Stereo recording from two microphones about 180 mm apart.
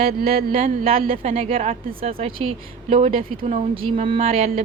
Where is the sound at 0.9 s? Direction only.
55° right (ahead or behind).